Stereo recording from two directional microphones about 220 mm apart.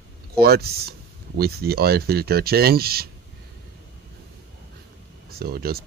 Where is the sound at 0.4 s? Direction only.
45° right (ahead or behind).